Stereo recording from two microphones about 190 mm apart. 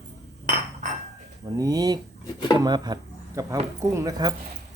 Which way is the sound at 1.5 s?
20° right (ahead or behind).